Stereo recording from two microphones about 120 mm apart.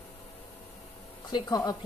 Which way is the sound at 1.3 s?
35° left (ahead or behind).